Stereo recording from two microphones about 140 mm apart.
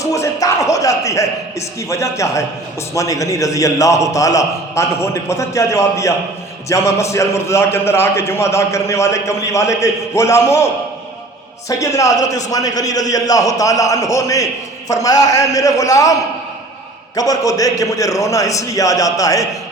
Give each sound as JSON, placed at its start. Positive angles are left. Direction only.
{"t": 0.0, "sound": "a man's voice", "side_deg": 20}
{"t": 11.7, "sound": "a man's voice", "side_deg": 25}
{"t": 17.2, "sound": "a man's voice", "side_deg": 25}